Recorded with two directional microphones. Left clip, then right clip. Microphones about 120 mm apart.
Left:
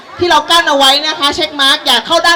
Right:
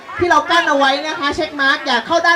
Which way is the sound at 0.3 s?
30° left (ahead or behind).